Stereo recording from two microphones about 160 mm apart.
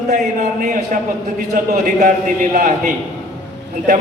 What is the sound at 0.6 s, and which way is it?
A man's voice, 55° right (ahead or behind).